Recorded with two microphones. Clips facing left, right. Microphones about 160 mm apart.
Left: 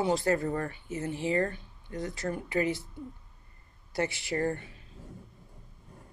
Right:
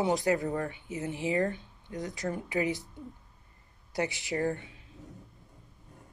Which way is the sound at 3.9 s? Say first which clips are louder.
Left 1 dB; 15° right (ahead or behind).